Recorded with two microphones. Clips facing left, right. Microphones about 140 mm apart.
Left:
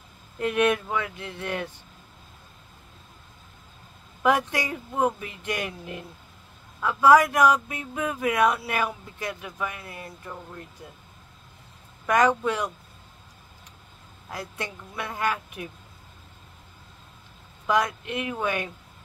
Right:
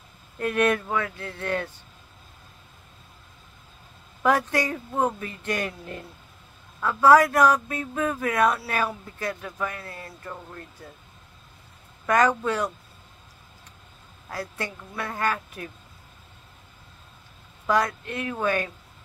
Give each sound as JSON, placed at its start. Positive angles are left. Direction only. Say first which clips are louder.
{"t": 0.4, "sound": "speech", "louder": "even", "side_deg": 15}
{"t": 4.2, "sound": "speech", "louder": "right 1 dB", "side_deg": 15}
{"t": 12.1, "sound": "speech", "louder": "even", "side_deg": 15}
{"t": 14.3, "sound": "speech", "louder": "right 2 dB", "side_deg": 15}
{"t": 17.6, "sound": "speech", "louder": "right 1 dB", "side_deg": 15}